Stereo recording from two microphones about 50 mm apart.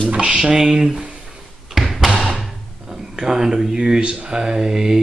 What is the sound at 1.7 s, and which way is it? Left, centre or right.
Thump, centre.